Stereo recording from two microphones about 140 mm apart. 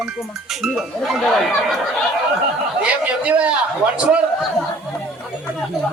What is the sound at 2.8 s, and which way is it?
A woman's voice, 10° right (ahead or behind).